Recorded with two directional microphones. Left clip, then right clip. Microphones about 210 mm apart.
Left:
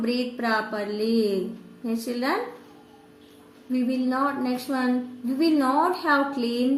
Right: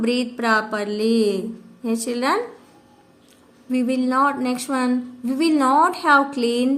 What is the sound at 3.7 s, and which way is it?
A woman's voice, 50° right (ahead or behind).